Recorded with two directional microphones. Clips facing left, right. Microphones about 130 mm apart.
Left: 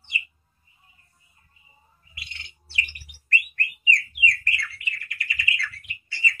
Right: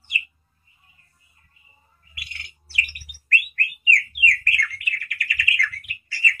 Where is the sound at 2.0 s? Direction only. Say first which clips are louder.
Right 2 dB; 25° left (ahead or behind).